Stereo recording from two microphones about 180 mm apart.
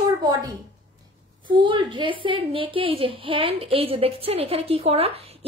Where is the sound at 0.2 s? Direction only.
20° right (ahead or behind).